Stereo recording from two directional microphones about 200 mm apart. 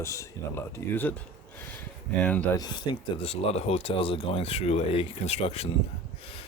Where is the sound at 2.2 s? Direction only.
5° left (ahead or behind).